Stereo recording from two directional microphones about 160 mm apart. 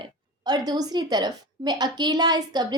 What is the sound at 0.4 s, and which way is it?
A woman's voice, 25° right (ahead or behind).